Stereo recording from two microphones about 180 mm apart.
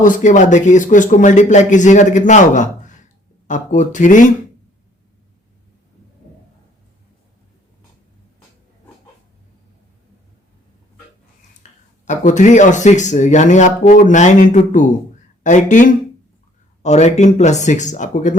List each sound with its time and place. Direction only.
0.0 s speech: 45° left (ahead or behind)
11.6 s a sound: 40° left (ahead or behind)
12.0 s speech: 45° left (ahead or behind)